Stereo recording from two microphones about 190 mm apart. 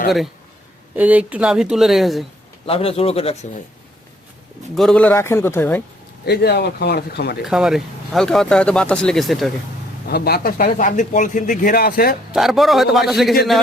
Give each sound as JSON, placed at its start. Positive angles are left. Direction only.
{"t": 0.9, "sound": "speech", "side_deg": -10}
{"t": 2.6, "sound": "speech", "side_deg": 30}
{"t": 4.7, "sound": "a man's voice", "side_deg": 0}
{"t": 6.2, "sound": "speech", "side_deg": 60}
{"t": 7.4, "sound": "speech", "side_deg": -5}
{"t": 10.1, "sound": "speech", "side_deg": 55}
{"t": 12.3, "sound": "speech", "side_deg": 0}